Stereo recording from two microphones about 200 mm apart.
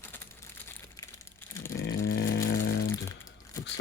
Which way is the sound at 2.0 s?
55° left (ahead or behind).